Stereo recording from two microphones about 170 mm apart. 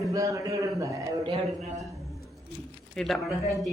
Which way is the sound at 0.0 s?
20° right (ahead or behind).